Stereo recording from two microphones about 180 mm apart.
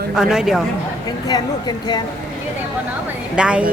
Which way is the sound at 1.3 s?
20° left (ahead or behind).